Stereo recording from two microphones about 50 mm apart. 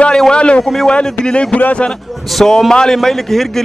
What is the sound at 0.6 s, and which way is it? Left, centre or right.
Speech, centre.